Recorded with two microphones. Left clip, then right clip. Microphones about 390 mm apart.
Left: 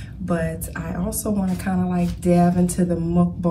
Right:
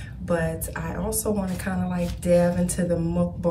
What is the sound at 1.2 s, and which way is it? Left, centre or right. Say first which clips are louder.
A woman's voice: left 3 dB; centre.